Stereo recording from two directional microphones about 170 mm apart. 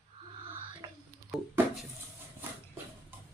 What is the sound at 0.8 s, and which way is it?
Music, 25° right (ahead or behind).